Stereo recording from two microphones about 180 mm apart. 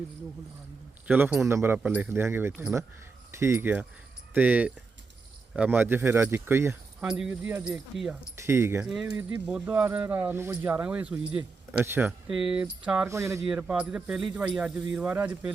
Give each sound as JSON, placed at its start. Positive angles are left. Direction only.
{"t": 1.0, "sound": "speech", "side_deg": -10}
{"t": 13.1, "sound": "speech", "side_deg": -15}